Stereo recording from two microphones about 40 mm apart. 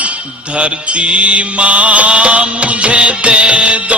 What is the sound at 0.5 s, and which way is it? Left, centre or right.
Music, right.